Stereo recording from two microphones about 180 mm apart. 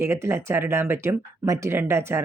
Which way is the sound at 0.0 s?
15° right (ahead or behind).